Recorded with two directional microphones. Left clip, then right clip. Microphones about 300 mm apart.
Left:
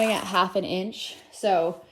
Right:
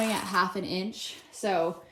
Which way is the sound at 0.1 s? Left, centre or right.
Centre.